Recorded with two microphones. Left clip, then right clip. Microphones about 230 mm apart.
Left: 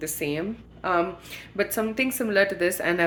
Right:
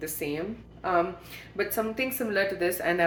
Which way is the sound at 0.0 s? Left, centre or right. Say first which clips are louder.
Left 3 dB; left.